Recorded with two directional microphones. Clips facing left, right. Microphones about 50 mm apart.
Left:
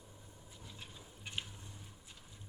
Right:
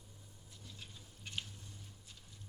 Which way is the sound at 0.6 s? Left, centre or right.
Centre.